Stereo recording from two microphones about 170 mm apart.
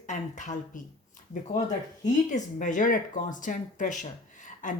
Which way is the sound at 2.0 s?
45° left (ahead or behind).